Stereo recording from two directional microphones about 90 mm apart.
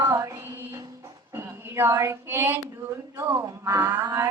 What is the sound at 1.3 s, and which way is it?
A woman's voice, 25° right (ahead or behind).